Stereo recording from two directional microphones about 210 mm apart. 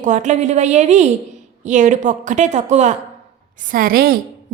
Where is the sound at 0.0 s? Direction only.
35° right (ahead or behind).